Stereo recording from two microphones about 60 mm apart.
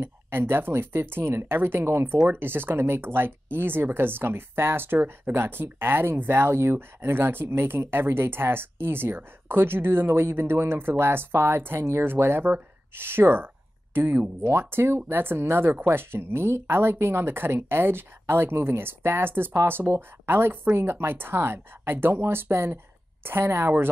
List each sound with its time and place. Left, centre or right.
0.0 s speech: right